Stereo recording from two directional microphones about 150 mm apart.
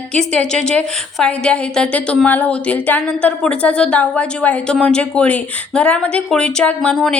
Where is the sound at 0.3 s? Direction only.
5° left (ahead or behind).